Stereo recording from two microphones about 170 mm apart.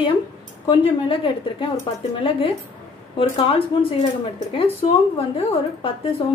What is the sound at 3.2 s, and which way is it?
Speech, 30° left (ahead or behind).